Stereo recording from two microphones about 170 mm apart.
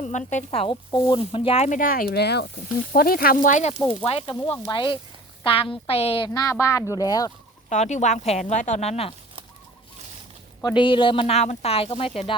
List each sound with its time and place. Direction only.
0.0 s speech: 45° left (ahead or behind); by 2.5 s 75° left (ahead or behind)
2.9 s a woman's voice: 60° left (ahead or behind); by 7.3 s 20° left (ahead or behind)
7.7 s speech: 45° left (ahead or behind)
10.6 s a woman's voice: 25° left (ahead or behind)